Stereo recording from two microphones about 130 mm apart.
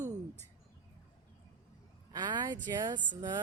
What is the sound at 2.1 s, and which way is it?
Speech, 35° right (ahead or behind).